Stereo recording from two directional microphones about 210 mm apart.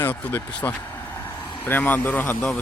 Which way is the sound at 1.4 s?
20° left (ahead or behind).